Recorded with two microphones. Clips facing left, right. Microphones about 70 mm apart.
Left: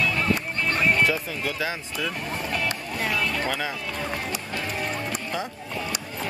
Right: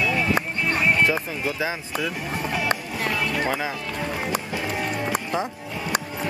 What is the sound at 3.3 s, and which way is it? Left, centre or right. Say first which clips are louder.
Music: right 2 dB; centre.